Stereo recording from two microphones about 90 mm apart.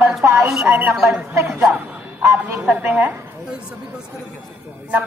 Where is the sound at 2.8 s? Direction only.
20° right (ahead or behind).